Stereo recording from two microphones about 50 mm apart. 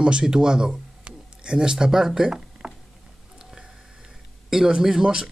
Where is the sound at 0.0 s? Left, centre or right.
Centre.